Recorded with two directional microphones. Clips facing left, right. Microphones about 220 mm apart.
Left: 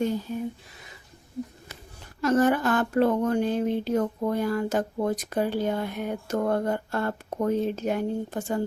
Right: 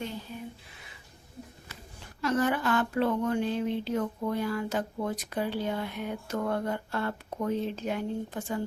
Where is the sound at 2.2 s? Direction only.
45° left (ahead or behind).